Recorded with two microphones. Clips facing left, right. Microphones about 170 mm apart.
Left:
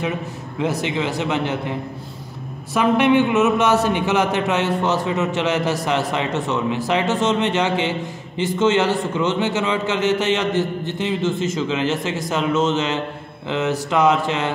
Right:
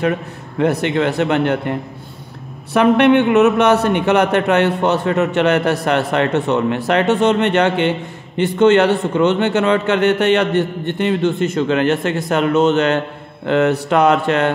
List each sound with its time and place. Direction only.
0.0 s speech: 60° right (ahead or behind)